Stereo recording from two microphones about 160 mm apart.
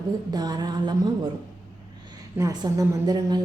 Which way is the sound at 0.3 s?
25° right (ahead or behind).